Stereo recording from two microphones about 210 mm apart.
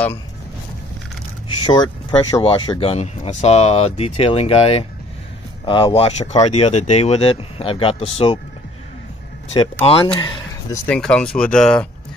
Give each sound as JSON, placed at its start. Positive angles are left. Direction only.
{"t": 1.6, "sound": "speech", "side_deg": 20}
{"t": 9.5, "sound": "speech", "side_deg": 30}
{"t": 10.9, "sound": "speech", "side_deg": 5}